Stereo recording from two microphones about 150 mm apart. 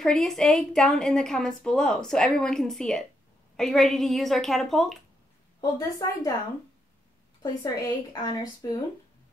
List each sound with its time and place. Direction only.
0.0 s a woman's voice: centre (ahead or behind)
5.6 s a woman's voice: 25° left (ahead or behind)
7.6 s a woman's voice: 25° left (ahead or behind)